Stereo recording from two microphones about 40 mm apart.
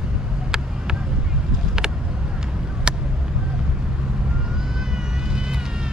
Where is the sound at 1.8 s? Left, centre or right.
Centre.